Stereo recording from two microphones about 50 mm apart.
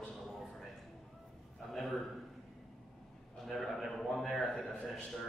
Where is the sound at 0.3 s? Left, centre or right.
Centre.